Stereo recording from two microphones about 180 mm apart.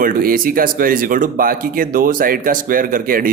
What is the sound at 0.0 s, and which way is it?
Speech, 50° right (ahead or behind).